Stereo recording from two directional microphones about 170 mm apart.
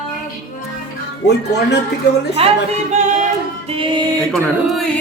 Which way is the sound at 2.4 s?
35° right (ahead or behind).